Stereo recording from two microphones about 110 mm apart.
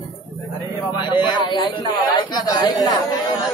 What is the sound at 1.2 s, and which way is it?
Speech, 45° left (ahead or behind).